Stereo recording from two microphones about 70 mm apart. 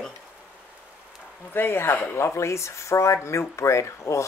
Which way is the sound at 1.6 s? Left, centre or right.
Left.